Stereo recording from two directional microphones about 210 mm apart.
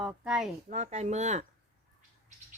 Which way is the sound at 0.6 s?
35° right (ahead or behind).